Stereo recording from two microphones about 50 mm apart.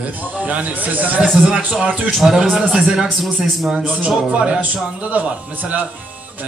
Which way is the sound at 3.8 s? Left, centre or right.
Right.